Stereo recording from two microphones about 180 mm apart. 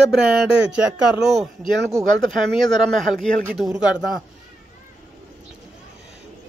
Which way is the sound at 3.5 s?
5° right (ahead or behind).